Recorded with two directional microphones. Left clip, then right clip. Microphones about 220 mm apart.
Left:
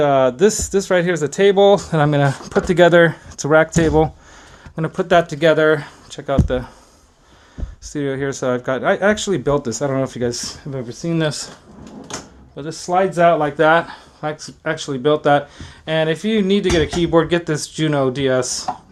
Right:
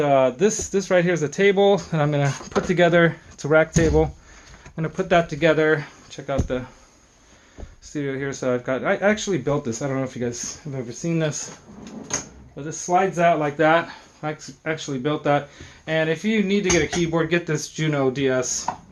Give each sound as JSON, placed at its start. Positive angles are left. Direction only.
{"t": 0.0, "sound": "speech", "side_deg": 40}
{"t": 7.9, "sound": "speech", "side_deg": 35}
{"t": 12.5, "sound": "speech", "side_deg": 40}